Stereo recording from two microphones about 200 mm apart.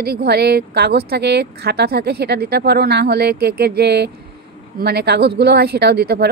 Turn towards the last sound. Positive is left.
turn(degrees=-55)  # may be behind; listen again after turning